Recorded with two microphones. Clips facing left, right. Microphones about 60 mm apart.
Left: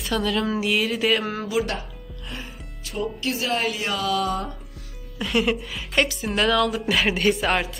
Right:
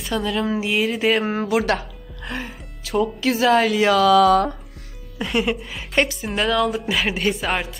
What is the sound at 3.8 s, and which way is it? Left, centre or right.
Speech, right.